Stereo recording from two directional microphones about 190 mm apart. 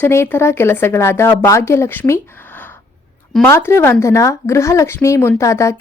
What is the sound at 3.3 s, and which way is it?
A woman's voice, 10° left (ahead or behind).